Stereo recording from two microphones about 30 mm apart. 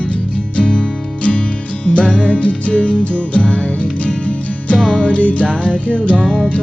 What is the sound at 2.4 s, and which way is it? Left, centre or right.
Music, left.